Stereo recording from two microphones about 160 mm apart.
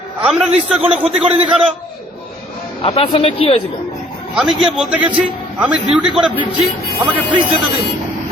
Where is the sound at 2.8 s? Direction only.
40° left (ahead or behind).